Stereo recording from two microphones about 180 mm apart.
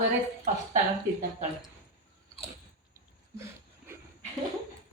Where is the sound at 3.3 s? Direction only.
15° right (ahead or behind).